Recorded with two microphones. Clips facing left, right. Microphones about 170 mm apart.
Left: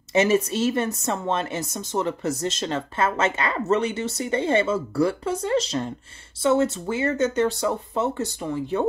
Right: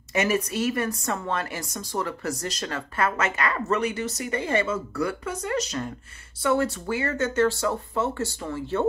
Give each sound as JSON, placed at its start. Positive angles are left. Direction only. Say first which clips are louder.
{"t": 0.1, "sound": "speech", "louder": "left 5 dB", "side_deg": 25}